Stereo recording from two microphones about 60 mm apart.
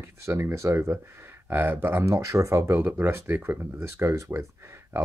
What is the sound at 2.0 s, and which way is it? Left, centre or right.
Speech, right.